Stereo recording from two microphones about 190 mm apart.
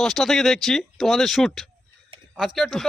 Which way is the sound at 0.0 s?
Centre (ahead or behind).